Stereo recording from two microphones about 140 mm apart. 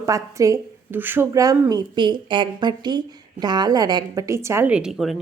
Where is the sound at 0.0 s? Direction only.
25° right (ahead or behind).